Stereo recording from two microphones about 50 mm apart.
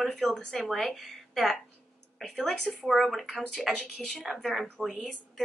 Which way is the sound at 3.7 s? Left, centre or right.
Left.